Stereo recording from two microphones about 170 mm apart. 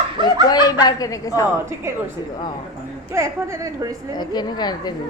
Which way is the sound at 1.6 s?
15° right (ahead or behind).